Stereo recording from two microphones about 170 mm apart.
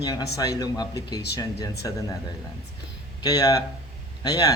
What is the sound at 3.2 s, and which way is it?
Speech, 25° left (ahead or behind).